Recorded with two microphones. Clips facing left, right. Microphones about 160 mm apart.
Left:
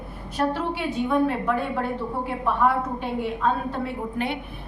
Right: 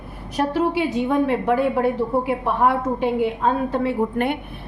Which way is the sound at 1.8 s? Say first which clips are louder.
Right 8 dB; 90° right.